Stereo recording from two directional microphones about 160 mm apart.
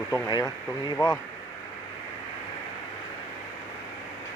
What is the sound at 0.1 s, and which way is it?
Speech, 25° left (ahead or behind).